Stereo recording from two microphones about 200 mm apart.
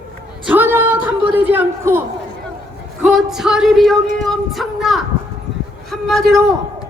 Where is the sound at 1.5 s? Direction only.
10° right (ahead or behind).